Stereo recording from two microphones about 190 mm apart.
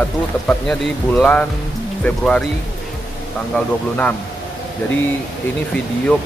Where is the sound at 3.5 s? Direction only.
5° left (ahead or behind).